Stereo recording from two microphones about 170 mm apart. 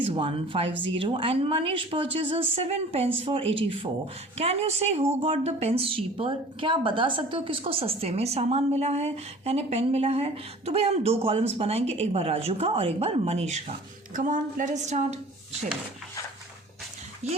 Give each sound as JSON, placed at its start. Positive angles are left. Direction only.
{"t": 0.0, "sound": "a woman's voice", "side_deg": -30}
{"t": 17.2, "sound": "a woman's voice", "side_deg": -40}